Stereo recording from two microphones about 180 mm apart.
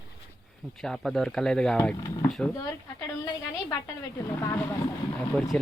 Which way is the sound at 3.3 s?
20° left (ahead or behind).